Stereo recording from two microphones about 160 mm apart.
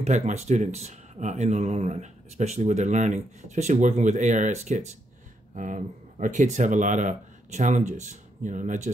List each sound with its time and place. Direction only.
0.0 s speech: 45° right (ahead or behind)